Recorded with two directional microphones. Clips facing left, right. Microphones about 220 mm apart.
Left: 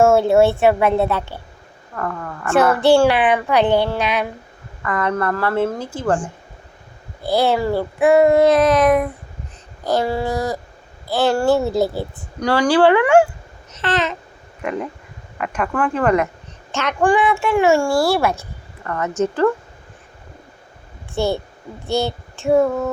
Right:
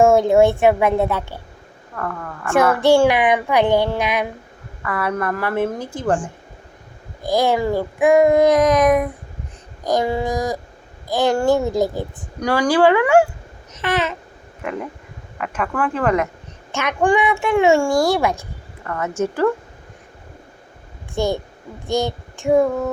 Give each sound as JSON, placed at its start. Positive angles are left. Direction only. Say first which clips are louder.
{"t": 0.0, "sound": "a woman's voice", "louder": "even", "side_deg": -15}
{"t": 2.0, "sound": "speech", "louder": "left 2 dB", "side_deg": 5}
{"t": 2.5, "sound": "a woman's voice", "louder": "left 1 dB", "side_deg": -10}
{"t": 13.7, "sound": "babbling", "louder": "even", "side_deg": -10}
{"t": 15.4, "sound": "speech", "louder": "left 2 dB", "side_deg": 0}
{"t": 16.7, "sound": "a woman's voice", "louder": "left 1 dB", "side_deg": -15}
{"t": 21.2, "sound": "a woman's voice", "louder": "left 1 dB", "side_deg": -15}
{"t": 21.8, "sound": "child singing", "louder": "even", "side_deg": -15}